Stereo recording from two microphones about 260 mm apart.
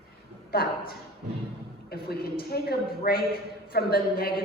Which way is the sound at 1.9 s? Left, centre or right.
Left.